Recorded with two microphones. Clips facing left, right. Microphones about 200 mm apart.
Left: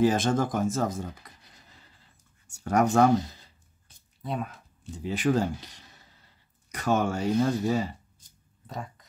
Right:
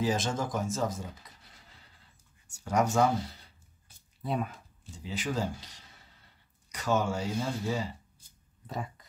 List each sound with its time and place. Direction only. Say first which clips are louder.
0.0 s speech: left 7 dB; 55° left (ahead or behind)
2.4 s speech: left 4 dB; 60° left (ahead or behind)
4.2 s speech: even; centre (ahead or behind)
4.9 s speech: left 8 dB; 55° left (ahead or behind)
6.7 s speech: left 3 dB; 55° left (ahead or behind)
8.6 s speech: even; centre (ahead or behind)